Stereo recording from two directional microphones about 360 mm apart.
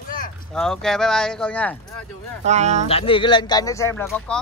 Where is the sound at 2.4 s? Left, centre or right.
Centre.